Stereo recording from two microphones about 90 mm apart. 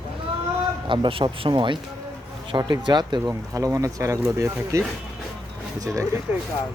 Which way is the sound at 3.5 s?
40° right (ahead or behind).